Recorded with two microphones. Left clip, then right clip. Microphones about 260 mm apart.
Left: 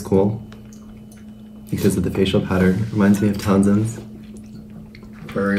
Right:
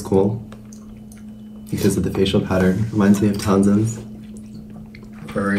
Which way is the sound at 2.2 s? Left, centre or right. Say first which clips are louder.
Right 1 dB; centre.